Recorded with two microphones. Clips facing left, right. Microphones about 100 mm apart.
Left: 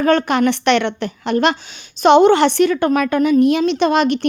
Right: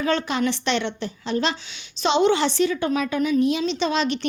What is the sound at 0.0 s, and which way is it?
A woman's voice, 55° left (ahead or behind).